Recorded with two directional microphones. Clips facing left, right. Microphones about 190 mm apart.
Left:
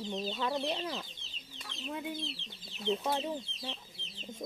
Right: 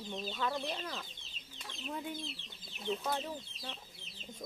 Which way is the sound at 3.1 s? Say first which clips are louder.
Left 4 dB; 20° left (ahead or behind).